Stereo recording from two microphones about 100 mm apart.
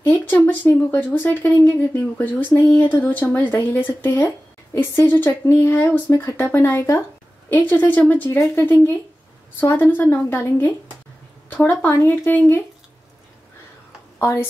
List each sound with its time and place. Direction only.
0.0 s speech: 20° left (ahead or behind)
9.8 s speech: 20° left (ahead or behind)
14.1 s a woman's voice: 25° left (ahead or behind)